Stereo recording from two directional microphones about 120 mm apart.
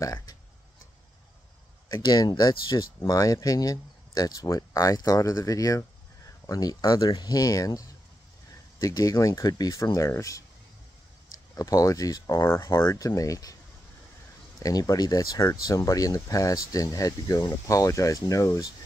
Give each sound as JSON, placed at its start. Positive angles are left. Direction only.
{"t": 0.0, "sound": "a sound", "side_deg": 30}
{"t": 1.9, "sound": "speech", "side_deg": 35}
{"t": 11.5, "sound": "speech", "side_deg": 30}
{"t": 14.6, "sound": "speech", "side_deg": 30}